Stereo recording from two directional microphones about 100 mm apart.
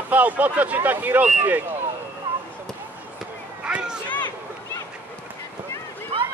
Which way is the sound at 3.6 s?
10° right (ahead or behind).